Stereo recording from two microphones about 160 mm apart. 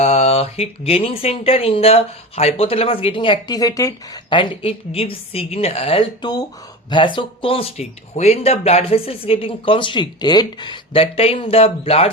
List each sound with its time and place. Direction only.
0.0 s speech: 45° left (ahead or behind)